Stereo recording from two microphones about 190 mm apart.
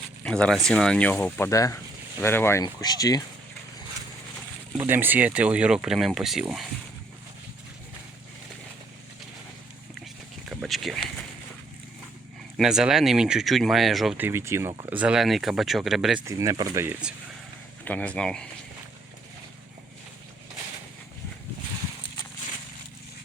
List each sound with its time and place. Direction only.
0.3 s speech: 5° left (ahead or behind); by 3.2 s 20° left (ahead or behind)
4.8 s speech: 10° right (ahead or behind)
10.5 s a sound: centre (ahead or behind)
12.5 s speech: 5° right (ahead or behind)
16.2 s speech: 15° right (ahead or behind)
17.8 s speech: 5° left (ahead or behind)